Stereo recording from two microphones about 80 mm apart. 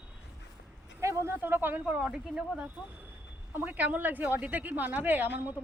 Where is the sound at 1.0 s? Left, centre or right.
Right.